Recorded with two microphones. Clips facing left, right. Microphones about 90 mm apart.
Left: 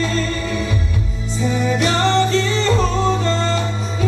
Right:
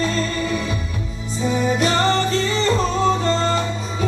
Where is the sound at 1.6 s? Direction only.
35° right (ahead or behind).